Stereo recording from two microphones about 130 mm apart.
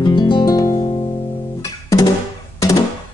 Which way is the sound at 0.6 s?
60° left (ahead or behind).